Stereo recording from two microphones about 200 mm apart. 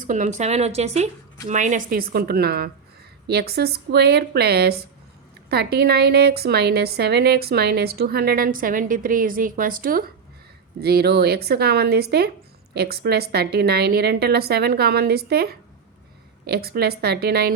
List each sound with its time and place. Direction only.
0.1 s a woman's voice: 35° right (ahead or behind); by 17.5 s 50° right (ahead or behind)